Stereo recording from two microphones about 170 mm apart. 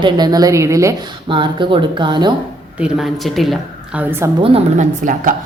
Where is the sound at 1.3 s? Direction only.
30° right (ahead or behind).